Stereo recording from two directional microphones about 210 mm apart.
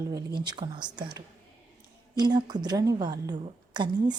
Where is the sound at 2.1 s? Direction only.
20° right (ahead or behind).